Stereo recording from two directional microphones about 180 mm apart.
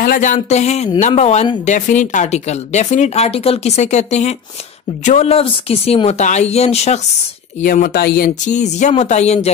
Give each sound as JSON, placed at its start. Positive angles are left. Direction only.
{"t": 0.0, "sound": "speech", "side_deg": 50}
{"t": 7.6, "sound": "speech", "side_deg": 55}